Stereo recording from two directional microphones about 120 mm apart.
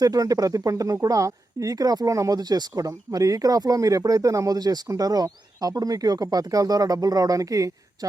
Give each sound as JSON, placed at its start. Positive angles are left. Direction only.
{"t": 0.0, "sound": "a woman's voice", "side_deg": -30}